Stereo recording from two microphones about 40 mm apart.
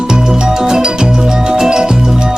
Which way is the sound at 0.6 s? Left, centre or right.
Centre.